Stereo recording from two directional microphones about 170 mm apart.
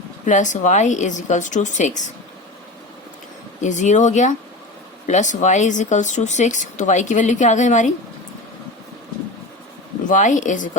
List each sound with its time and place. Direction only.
0.3 s speech: 45° left (ahead or behind)
3.6 s speech: 45° left (ahead or behind)
10.1 s speech: 45° left (ahead or behind)